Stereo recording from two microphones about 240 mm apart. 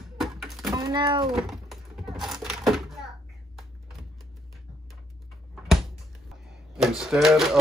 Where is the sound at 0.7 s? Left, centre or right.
Centre.